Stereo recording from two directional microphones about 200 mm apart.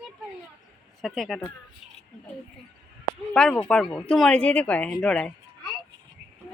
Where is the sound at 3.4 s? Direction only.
5° left (ahead or behind).